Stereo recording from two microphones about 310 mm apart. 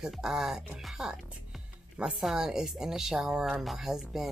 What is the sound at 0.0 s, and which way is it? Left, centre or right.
Speech, centre.